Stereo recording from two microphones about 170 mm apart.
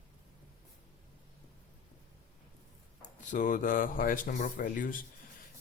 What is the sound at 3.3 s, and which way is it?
Speech, 50° left (ahead or behind).